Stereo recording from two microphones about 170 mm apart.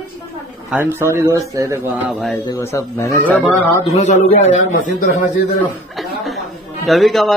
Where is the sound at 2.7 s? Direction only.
15° left (ahead or behind).